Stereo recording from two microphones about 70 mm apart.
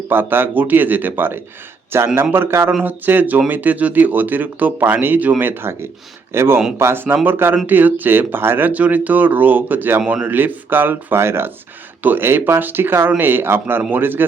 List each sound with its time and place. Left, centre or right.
0.1 s speech: right